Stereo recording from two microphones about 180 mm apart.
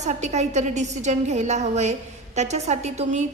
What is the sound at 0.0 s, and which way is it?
A woman's voice, 40° right (ahead or behind).